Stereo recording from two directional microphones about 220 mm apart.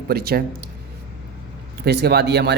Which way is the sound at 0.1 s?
45° right (ahead or behind).